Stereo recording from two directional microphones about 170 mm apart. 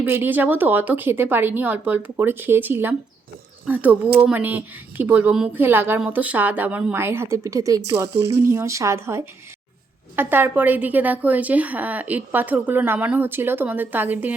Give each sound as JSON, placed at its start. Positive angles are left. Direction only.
{"t": 0.0, "sound": "a woman's voice", "side_deg": -10}